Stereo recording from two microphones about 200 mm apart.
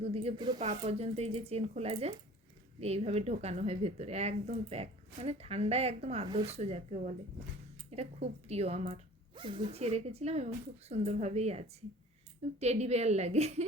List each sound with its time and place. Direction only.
0.0 s speech: 30° right (ahead or behind)
0.6 s speech: 30° right (ahead or behind)